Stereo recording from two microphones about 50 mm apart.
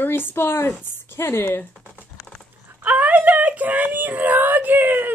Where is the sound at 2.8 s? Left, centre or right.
Right.